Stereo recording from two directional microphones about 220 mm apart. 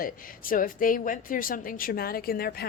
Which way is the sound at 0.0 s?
40° left (ahead or behind).